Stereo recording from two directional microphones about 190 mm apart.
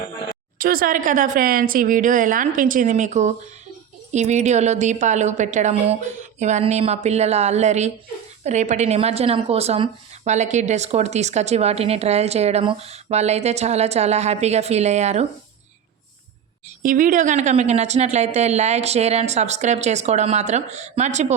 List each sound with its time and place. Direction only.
0.6 s a woman's voice: 50° right (ahead or behind)
16.8 s a woman's voice: 45° right (ahead or behind)